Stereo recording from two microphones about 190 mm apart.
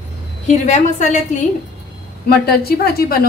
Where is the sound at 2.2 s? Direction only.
55° left (ahead or behind).